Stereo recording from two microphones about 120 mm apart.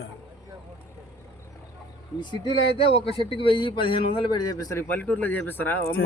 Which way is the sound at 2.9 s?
50° left (ahead or behind).